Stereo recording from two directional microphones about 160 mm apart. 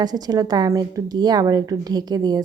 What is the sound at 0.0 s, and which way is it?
A woman's voice, 25° right (ahead or behind).